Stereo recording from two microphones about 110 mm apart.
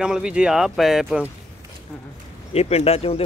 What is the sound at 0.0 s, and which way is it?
Speech, 5° right (ahead or behind).